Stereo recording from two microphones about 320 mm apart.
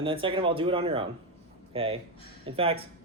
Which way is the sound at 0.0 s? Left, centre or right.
Centre.